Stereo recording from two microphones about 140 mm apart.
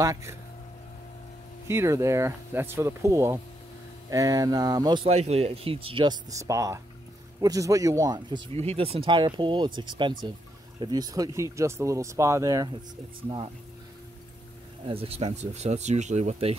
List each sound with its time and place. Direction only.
0.0 s speech: 20° right (ahead or behind)
1.7 s speech: 20° right (ahead or behind)
5.0 s speech: 50° right (ahead or behind); by 8.5 s 30° right (ahead or behind)
8.5 s speech: 45° right (ahead or behind); by 12.6 s 20° right (ahead or behind)
13.3 s speech: 40° right (ahead or behind)
14.9 s speech: 45° right (ahead or behind)